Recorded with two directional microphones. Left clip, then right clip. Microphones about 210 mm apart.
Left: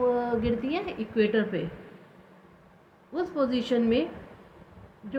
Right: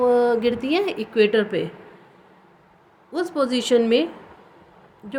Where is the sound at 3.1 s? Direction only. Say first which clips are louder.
Right 5 dB; 65° right (ahead or behind).